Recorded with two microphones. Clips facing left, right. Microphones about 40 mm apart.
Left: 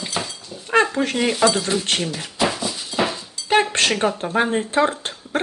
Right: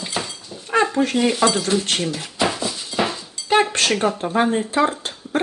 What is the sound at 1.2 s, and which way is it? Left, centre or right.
Speech, centre.